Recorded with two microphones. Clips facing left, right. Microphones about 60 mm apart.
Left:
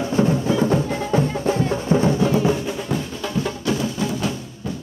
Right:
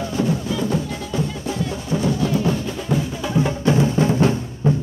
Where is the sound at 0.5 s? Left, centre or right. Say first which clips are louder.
Left 4 dB; left.